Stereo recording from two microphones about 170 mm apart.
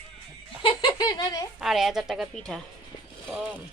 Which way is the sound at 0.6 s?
30° left (ahead or behind).